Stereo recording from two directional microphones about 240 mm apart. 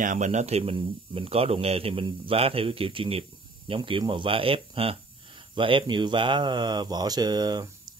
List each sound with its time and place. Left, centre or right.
0.0 s speech: right